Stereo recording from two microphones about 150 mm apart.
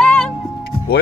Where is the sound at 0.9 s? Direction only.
90° left.